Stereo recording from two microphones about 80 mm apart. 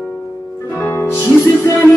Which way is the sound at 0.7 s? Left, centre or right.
Left.